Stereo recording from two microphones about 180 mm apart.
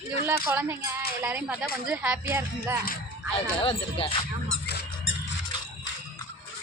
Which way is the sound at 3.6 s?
30° left (ahead or behind).